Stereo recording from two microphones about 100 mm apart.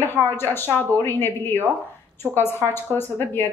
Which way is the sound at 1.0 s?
20° left (ahead or behind).